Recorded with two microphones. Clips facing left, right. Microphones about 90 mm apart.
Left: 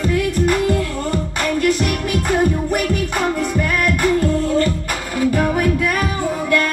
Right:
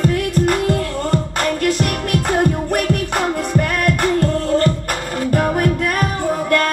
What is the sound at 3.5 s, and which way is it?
Music, 50° right (ahead or behind).